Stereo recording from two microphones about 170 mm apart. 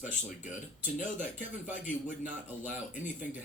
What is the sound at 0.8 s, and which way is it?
Speech, 45° left (ahead or behind).